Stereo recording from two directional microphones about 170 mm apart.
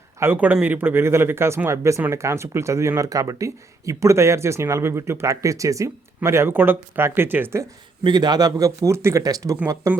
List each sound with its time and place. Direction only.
0.2 s speech: 10° right (ahead or behind)
8.0 s speech: 25° right (ahead or behind)